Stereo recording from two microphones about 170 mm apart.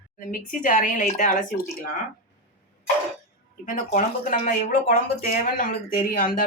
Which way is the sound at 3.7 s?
50° left (ahead or behind).